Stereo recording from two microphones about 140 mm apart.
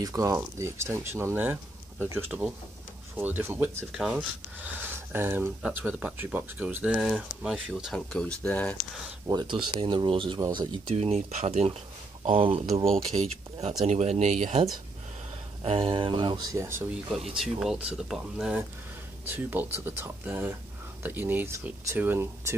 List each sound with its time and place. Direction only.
0.0 s speech: 25° right (ahead or behind); by 8.7 s 10° left (ahead or behind)
9.3 s speech: 30° right (ahead or behind)
10.9 s speech: 50° right (ahead or behind)
12.3 s speech: 40° right (ahead or behind); by 14.6 s 60° right (ahead or behind)
15.6 s speech: 40° right (ahead or behind)
16.5 s speech: 20° right (ahead or behind)
17.4 s speech: 5° right (ahead or behind)
19.2 s speech: 15° right (ahead or behind)